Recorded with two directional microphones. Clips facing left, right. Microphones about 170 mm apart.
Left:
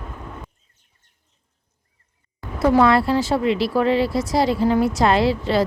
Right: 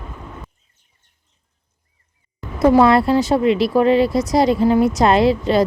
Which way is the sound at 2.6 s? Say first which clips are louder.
Right 3 dB; 15° right (ahead or behind).